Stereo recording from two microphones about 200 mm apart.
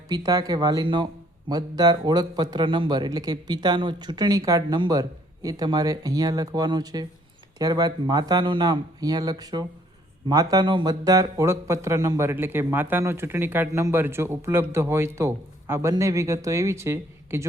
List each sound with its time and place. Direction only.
0.1 s speech: 20° right (ahead or behind)